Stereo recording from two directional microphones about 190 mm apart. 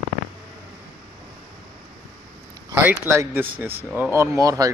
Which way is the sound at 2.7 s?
10° right (ahead or behind).